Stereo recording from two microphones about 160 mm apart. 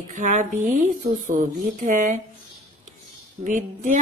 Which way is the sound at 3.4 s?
50° right (ahead or behind).